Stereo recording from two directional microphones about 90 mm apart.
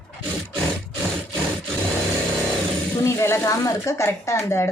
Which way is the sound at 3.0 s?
30° left (ahead or behind).